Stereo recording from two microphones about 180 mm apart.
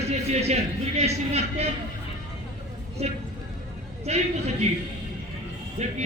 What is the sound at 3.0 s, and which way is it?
Speech, 35° right (ahead or behind).